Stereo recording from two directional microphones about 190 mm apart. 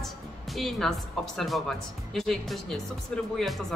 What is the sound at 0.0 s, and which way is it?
A woman's voice, centre (ahead or behind).